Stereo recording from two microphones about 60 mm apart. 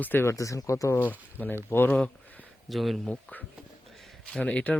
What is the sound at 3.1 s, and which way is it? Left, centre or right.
Speech, left.